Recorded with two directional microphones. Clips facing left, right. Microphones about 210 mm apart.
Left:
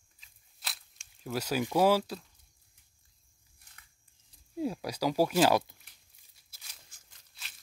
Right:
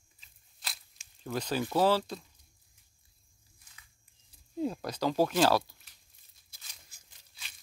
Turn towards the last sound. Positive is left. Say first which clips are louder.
# even
turn(degrees=-5)  # may be behind; listen again after turning